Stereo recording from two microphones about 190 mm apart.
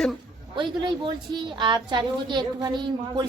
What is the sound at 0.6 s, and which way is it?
A woman's voice, 25° right (ahead or behind).